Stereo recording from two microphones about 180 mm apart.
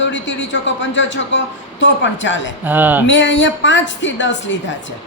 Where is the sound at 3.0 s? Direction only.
90° left.